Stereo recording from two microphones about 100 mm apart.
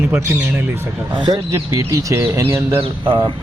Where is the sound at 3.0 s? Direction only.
55° right (ahead or behind).